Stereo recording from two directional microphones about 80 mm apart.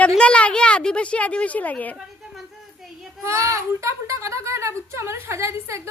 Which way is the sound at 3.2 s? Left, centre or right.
Right.